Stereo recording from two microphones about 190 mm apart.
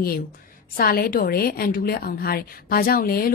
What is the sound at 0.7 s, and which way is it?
A woman's voice, 50° left (ahead or behind).